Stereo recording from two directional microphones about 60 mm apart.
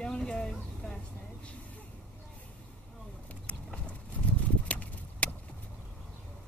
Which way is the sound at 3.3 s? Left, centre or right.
Left.